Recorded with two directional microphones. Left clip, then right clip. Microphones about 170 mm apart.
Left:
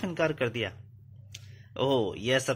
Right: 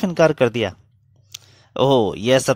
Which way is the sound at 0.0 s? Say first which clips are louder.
Right 13 dB; 55° right (ahead or behind).